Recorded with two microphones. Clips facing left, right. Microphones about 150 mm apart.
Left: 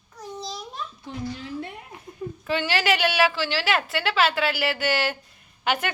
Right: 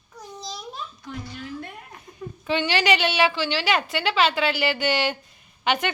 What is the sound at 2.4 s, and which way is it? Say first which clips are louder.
A woman's voice: right 2 dB; centre (ahead or behind).